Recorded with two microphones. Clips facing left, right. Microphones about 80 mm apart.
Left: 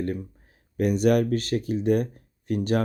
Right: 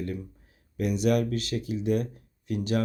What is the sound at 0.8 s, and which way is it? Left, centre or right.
Speech, left.